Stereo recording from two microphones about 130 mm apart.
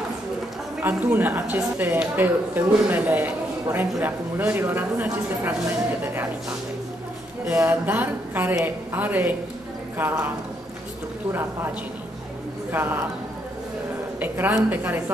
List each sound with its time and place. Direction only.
0.8 s speech: 15° right (ahead or behind)
7.5 s speech: 15° right (ahead or behind)
12.7 s speech: 15° right (ahead or behind)
14.2 s speech: 15° right (ahead or behind)